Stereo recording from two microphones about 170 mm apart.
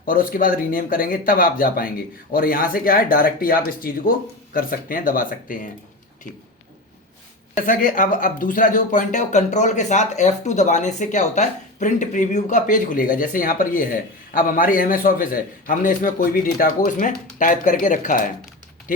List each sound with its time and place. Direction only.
0.0 s speech: 55° left (ahead or behind)
7.5 s speech: 55° left (ahead or behind)